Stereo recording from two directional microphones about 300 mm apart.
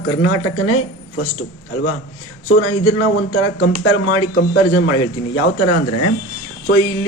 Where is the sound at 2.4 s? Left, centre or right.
Left.